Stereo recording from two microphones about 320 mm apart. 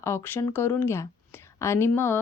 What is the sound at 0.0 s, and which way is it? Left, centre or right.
A woman's voice, centre.